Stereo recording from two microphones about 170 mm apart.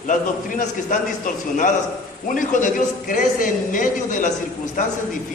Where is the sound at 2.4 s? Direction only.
50° left (ahead or behind).